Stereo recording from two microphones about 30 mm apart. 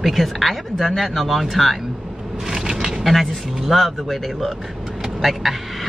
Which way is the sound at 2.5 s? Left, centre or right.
Right.